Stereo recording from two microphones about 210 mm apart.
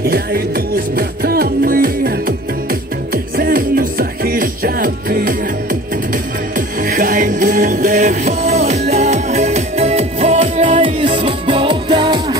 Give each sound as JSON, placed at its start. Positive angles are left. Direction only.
{"t": 0.0, "sound": "music", "side_deg": -45}